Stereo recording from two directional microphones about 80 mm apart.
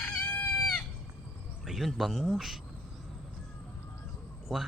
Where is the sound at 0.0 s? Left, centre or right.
Centre.